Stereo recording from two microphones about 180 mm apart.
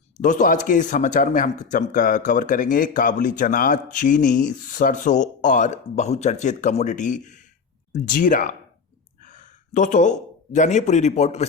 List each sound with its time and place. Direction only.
0.2 s speech: 45° left (ahead or behind)